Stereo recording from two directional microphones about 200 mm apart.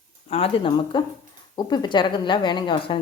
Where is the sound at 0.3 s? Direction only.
30° left (ahead or behind).